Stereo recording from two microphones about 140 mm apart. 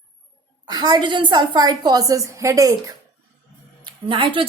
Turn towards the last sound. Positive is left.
turn(degrees=-35)  # may be behind; listen again after turning